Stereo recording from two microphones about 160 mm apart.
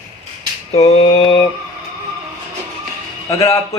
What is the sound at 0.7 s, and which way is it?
Speech, 40° left (ahead or behind).